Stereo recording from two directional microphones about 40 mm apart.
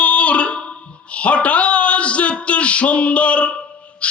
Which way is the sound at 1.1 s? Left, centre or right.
Left.